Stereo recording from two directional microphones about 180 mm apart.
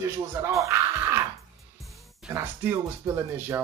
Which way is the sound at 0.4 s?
15° right (ahead or behind).